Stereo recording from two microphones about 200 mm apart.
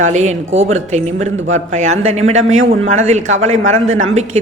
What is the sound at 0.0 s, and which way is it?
A woman's voice, 35° right (ahead or behind).